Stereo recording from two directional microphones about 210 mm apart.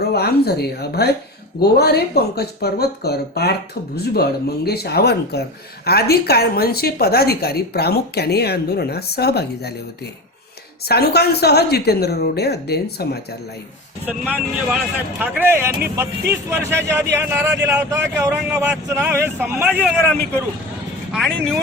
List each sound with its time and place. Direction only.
0.0 s speech: 50° left (ahead or behind)
10.8 s speech: 50° left (ahead or behind)
14.1 s speech: 5° right (ahead or behind)
21.1 s speech: centre (ahead or behind)